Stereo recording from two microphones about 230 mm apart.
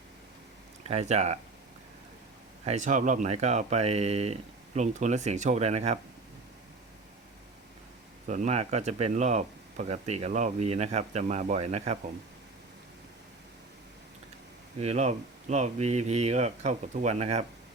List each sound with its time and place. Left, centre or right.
0.9 s speech: right
2.6 s speech: right
8.3 s speech: right
14.8 s speech: right